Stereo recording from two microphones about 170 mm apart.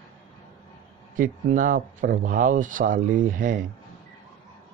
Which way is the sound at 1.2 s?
50° right (ahead or behind).